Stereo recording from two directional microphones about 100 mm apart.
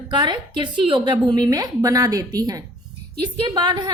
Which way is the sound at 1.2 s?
40° right (ahead or behind).